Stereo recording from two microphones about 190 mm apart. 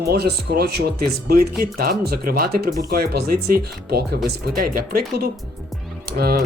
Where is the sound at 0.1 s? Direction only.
55° right (ahead or behind).